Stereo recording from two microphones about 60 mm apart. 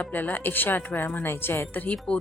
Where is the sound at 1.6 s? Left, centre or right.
Left.